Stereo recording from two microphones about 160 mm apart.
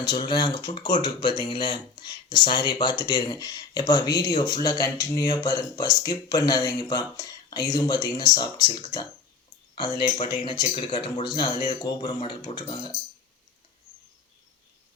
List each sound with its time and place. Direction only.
0.0 s speech: 30° left (ahead or behind)
10.4 s speech: 30° left (ahead or behind)